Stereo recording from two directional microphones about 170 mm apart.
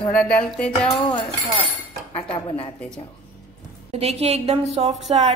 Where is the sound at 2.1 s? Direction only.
35° left (ahead or behind).